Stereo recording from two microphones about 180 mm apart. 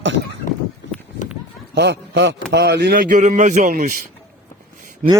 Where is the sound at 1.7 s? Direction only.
70° right (ahead or behind).